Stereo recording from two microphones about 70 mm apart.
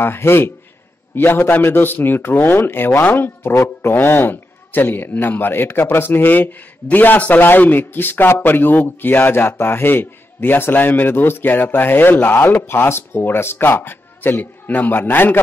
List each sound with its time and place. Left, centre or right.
0.0 s a man's voice: left